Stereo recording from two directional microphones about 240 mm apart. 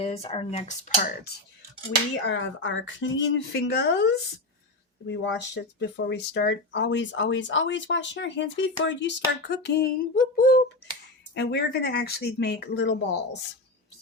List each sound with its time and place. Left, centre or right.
0.0 s speech: left
1.0 s speech: left
2.2 s speech: left